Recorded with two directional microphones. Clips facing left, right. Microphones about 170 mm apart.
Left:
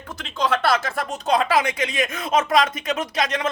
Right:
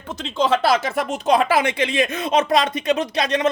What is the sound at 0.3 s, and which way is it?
Speech, 25° right (ahead or behind).